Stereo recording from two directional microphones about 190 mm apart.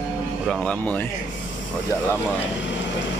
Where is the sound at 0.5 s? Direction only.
5° left (ahead or behind).